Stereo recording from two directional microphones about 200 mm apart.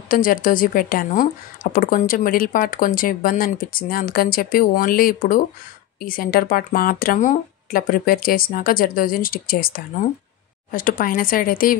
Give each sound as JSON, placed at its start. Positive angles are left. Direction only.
{"t": 0.1, "sound": "a woman's voice", "side_deg": 45}